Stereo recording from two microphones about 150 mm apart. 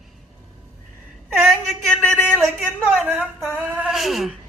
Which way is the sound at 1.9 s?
5° left (ahead or behind).